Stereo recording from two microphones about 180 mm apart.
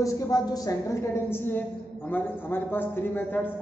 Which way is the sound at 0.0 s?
20° left (ahead or behind).